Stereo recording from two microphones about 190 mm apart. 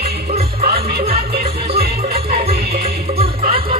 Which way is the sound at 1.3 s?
55° right (ahead or behind).